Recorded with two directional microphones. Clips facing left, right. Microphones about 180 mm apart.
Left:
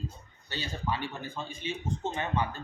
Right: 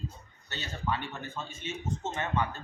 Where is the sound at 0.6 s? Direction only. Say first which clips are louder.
Even; 10° left (ahead or behind).